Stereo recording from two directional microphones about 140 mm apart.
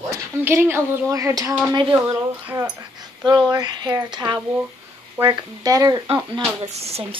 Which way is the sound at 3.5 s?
25° right (ahead or behind).